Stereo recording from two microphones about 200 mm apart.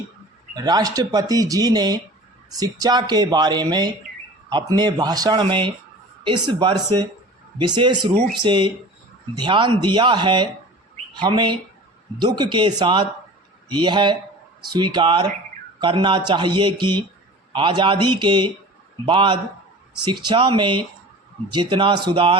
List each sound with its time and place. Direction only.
0.5 s speech: 20° right (ahead or behind)
8.2 s speech: 55° right (ahead or behind)
8.4 s speech: 25° right (ahead or behind)